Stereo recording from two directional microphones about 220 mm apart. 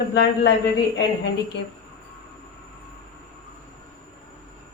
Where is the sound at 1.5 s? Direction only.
50° left (ahead or behind).